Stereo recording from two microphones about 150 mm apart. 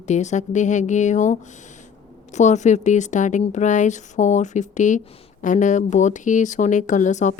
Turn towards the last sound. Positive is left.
turn(degrees=55)  # may be behind; listen again after turning